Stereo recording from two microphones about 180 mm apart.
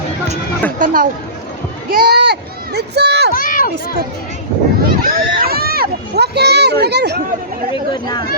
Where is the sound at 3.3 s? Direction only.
50° left (ahead or behind).